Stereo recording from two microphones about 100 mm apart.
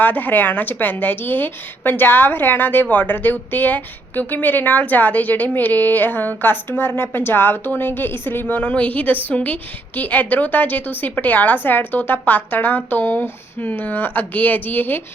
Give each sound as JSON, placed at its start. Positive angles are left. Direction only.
{"t": 0.0, "sound": "a woman's voice", "side_deg": 15}